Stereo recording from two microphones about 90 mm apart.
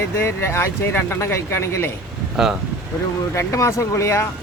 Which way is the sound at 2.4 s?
5° right (ahead or behind).